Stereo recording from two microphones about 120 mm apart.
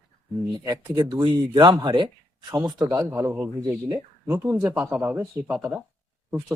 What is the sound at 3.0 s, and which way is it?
Speech, 20° right (ahead or behind).